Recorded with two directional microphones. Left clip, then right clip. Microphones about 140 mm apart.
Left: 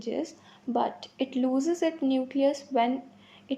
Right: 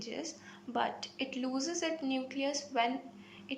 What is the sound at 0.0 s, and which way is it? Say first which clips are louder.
Speech: left 9 dB; 45° left (ahead or behind).